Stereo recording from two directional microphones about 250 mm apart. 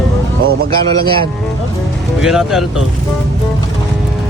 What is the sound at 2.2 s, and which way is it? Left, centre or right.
Speech, centre.